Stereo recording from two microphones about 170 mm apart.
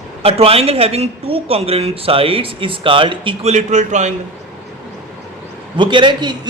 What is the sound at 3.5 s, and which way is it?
Speech, 45° right (ahead or behind).